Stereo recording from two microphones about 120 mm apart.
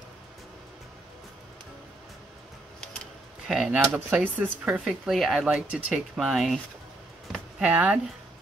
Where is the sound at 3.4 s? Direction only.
5° right (ahead or behind).